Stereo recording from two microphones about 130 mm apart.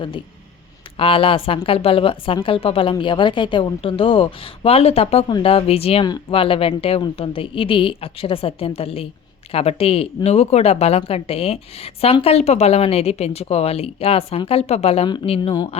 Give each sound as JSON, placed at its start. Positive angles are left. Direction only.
{"t": 0.9, "sound": "a woman's voice", "side_deg": 45}